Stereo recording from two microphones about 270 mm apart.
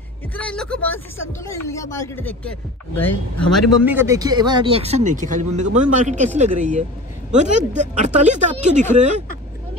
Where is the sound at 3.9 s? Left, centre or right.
Centre; by 9.2 s right.